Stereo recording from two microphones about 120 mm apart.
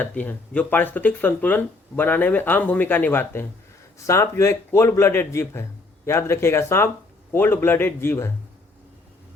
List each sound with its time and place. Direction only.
0.0 s a man's voice: 15° left (ahead or behind)